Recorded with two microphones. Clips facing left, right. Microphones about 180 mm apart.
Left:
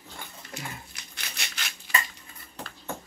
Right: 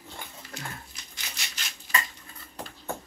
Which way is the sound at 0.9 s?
60° left (ahead or behind).